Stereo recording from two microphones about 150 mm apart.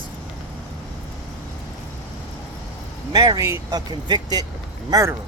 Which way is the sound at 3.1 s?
25° right (ahead or behind).